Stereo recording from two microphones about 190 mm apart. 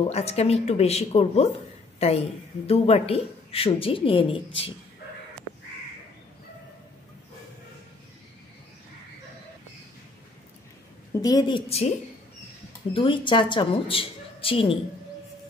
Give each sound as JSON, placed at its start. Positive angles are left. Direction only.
{"t": 0.1, "sound": "a woman's voice", "side_deg": 35}
{"t": 11.1, "sound": "speech", "side_deg": 20}
{"t": 12.9, "sound": "speech", "side_deg": 25}